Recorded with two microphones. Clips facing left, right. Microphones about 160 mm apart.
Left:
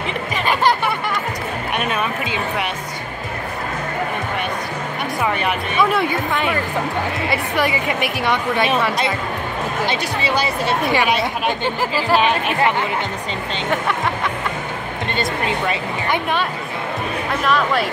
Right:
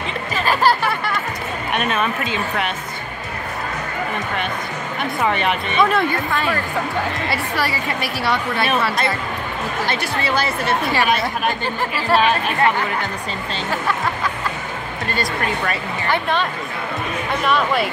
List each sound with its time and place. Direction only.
1.8 s speech: 10° left (ahead or behind)
5.2 s speech: 5° left (ahead or behind)
6.3 s speech: 15° left (ahead or behind)
15.1 s speech: 20° left (ahead or behind)
17.4 s speech: centre (ahead or behind)